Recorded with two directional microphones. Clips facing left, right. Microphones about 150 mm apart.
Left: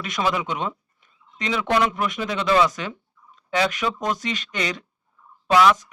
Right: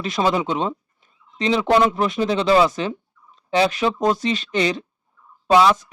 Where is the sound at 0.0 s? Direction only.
30° right (ahead or behind).